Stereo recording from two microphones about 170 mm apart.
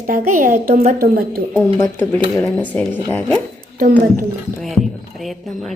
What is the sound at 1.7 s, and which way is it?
Speech, 15° left (ahead or behind).